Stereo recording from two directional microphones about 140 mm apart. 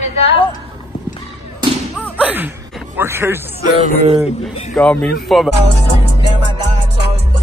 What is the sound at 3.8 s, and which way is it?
Speech, 50° right (ahead or behind).